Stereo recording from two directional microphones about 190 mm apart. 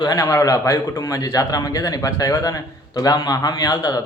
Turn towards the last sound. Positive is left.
turn(degrees=20)  # may be behind; listen again after turning